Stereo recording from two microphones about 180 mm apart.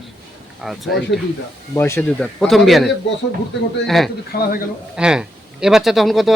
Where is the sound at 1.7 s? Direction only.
15° left (ahead or behind).